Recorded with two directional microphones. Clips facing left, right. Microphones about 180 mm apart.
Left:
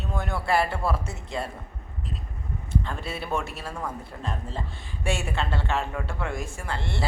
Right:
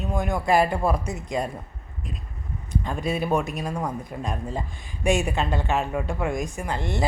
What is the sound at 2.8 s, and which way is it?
Speech, 15° right (ahead or behind).